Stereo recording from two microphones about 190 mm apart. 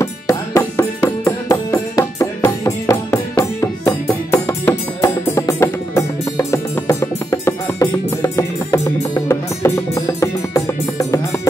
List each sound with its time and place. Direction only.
0.0 s music: 15° left (ahead or behind)